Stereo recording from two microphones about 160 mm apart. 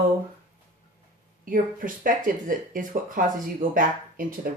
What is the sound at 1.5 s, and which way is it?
Speech, 60° right (ahead or behind).